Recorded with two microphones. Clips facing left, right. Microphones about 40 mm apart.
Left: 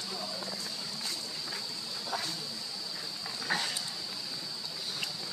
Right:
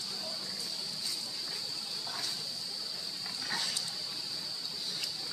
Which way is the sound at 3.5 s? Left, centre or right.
Left.